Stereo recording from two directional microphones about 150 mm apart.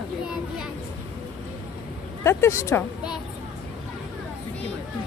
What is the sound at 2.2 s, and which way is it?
Speech, 15° left (ahead or behind).